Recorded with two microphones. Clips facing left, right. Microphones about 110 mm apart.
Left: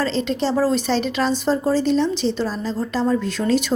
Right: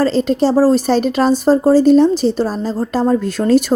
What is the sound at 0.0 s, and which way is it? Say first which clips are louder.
Speech: right 7 dB; 45° right (ahead or behind).